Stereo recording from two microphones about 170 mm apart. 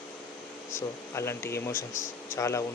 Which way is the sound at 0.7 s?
15° left (ahead or behind).